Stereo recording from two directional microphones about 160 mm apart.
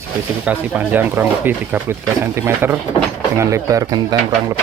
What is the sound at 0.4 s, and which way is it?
Speech, 10° right (ahead or behind).